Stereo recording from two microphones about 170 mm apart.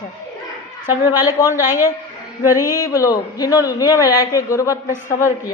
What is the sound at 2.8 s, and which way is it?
A man's voice, 20° left (ahead or behind).